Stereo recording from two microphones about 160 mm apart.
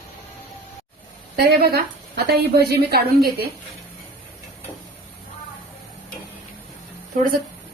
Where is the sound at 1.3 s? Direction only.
85° right.